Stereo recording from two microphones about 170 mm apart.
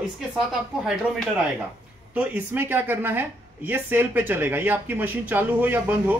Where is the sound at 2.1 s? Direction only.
10° right (ahead or behind).